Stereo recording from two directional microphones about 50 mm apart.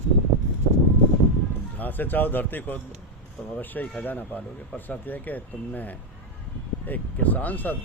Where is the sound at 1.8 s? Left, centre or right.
Left.